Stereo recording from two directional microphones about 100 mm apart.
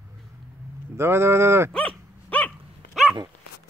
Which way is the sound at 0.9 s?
25° right (ahead or behind).